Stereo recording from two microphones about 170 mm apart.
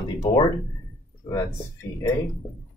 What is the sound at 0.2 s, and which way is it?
Speech, 35° left (ahead or behind).